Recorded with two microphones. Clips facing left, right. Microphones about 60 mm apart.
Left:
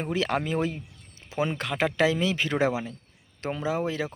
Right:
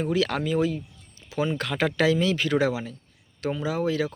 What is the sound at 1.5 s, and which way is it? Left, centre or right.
Speech, centre.